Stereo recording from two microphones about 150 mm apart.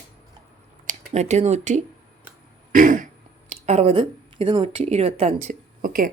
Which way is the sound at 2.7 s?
60° right (ahead or behind).